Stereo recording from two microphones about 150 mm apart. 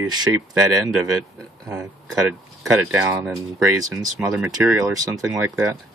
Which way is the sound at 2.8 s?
15° right (ahead or behind).